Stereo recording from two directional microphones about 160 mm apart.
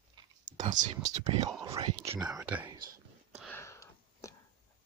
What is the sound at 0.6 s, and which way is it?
Speech, 50° right (ahead or behind).